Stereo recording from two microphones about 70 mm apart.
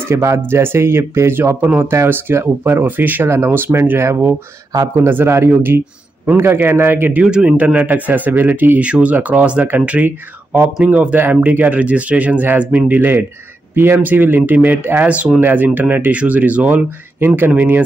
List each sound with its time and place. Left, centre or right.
0.0 s a man's voice: right
15.0 s a man's voice: centre